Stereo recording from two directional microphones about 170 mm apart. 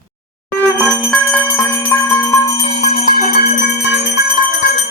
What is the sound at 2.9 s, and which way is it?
Music, 60° left (ahead or behind).